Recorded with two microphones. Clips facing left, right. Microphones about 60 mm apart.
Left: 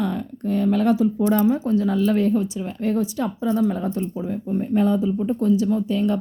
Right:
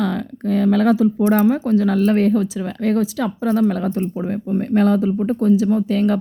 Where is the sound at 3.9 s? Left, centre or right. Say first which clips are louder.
Right 4 dB; right.